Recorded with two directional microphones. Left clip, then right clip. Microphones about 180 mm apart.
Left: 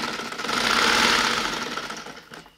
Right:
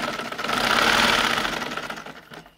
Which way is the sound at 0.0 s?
20° right (ahead or behind).